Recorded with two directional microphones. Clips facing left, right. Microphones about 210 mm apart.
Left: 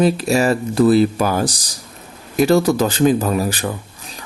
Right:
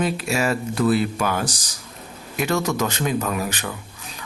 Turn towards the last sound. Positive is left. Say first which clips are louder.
# left 6 dB
turn(degrees=35)  # may be behind; listen again after turning